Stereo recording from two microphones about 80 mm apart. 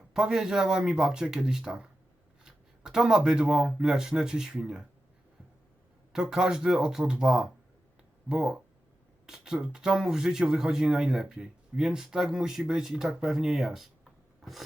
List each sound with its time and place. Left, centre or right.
0.1 s speech: centre
6.1 s speech: centre